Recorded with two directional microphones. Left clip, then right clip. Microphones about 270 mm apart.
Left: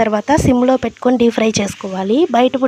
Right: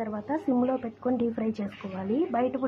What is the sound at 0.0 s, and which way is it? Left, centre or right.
Speech, left.